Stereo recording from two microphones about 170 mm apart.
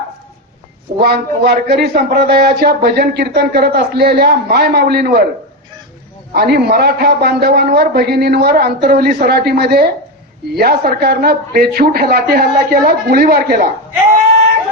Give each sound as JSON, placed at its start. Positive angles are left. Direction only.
{"t": 1.0, "sound": "speech", "side_deg": -70}
{"t": 6.3, "sound": "speech", "side_deg": -70}